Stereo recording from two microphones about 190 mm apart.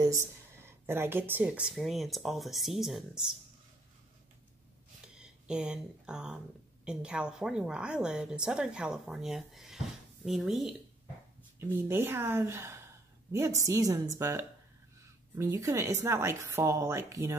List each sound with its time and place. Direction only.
0.0 s speech: 15° right (ahead or behind)
5.0 s speech: 5° right (ahead or behind)